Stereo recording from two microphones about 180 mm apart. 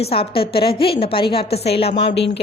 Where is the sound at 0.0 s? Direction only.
30° left (ahead or behind).